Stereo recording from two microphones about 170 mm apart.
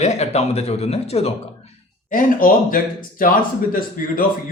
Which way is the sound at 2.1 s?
55° left (ahead or behind).